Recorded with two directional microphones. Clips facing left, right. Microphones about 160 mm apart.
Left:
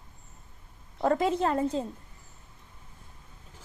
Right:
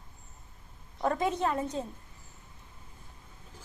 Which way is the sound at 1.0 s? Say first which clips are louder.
Left 4 dB; 25° left (ahead or behind).